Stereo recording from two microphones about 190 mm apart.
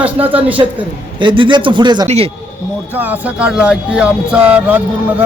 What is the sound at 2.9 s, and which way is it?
Speech, 10° right (ahead or behind).